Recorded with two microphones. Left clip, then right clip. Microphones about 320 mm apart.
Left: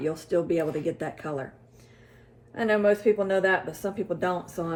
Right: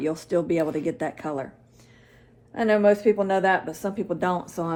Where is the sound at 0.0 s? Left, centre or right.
Right.